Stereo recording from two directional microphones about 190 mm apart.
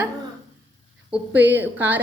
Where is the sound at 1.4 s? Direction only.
10° right (ahead or behind).